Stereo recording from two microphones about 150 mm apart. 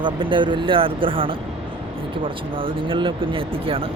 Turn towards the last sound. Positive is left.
turn(degrees=-35)  # may be behind; listen again after turning